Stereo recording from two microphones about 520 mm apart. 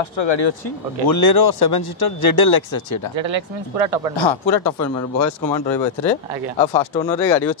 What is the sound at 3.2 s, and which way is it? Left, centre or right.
Speech, right.